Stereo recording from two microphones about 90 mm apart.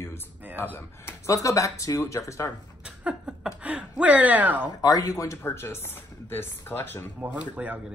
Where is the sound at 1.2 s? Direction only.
35° left (ahead or behind).